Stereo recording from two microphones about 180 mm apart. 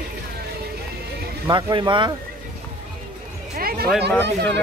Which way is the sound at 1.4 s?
25° right (ahead or behind).